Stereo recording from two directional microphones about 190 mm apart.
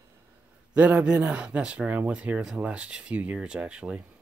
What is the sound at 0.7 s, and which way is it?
Speech, 5° right (ahead or behind).